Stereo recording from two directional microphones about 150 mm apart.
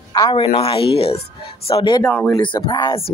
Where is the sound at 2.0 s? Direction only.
10° left (ahead or behind).